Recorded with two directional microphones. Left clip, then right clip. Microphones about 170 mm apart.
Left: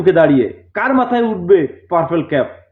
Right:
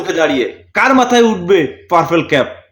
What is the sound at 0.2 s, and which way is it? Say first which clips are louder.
A man's voice: left 2 dB; 20° right (ahead or behind).